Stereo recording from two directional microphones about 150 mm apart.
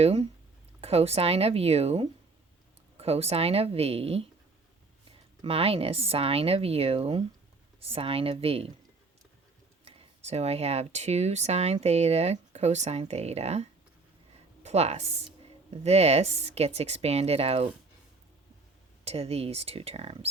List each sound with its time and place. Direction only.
0.0 s speech: 40° right (ahead or behind)
5.4 s speech: 40° right (ahead or behind)
9.8 s a woman's voice: 45° right (ahead or behind)
19.0 s speech: 40° right (ahead or behind)